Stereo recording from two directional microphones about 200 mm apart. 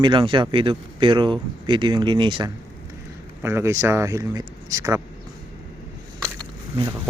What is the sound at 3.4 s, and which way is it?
Speech, 10° right (ahead or behind).